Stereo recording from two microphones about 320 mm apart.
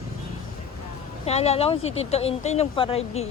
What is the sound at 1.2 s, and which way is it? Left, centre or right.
Speech, centre.